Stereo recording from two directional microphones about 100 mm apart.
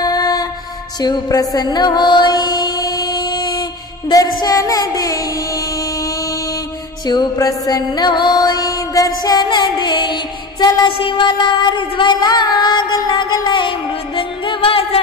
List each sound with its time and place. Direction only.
0.0 s music: 40° left (ahead or behind)
7.1 s music: 40° left (ahead or behind)
11.0 s music: 60° left (ahead or behind)